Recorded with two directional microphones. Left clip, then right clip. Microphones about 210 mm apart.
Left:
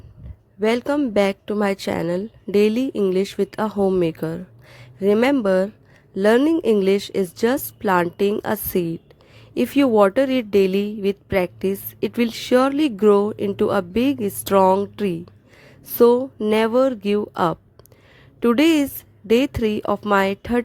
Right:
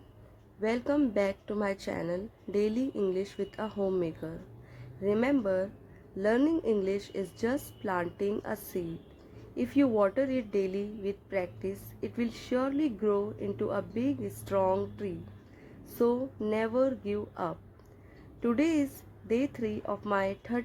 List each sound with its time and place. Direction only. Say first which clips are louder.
0.6 s a woman's voice: left 9 dB; 40° left (ahead or behind)